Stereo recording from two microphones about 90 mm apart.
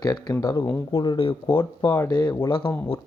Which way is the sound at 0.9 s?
90° left.